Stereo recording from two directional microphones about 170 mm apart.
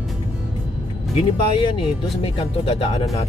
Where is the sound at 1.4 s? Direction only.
30° left (ahead or behind).